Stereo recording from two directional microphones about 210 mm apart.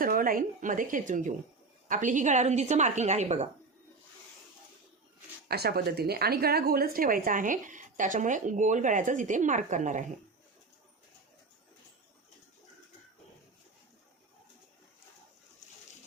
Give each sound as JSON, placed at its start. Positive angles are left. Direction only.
{"t": 0.0, "sound": "a woman's voice", "side_deg": -40}
{"t": 5.5, "sound": "a woman's voice", "side_deg": -50}